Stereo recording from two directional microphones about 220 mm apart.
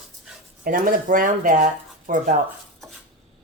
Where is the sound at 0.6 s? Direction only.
40° right (ahead or behind).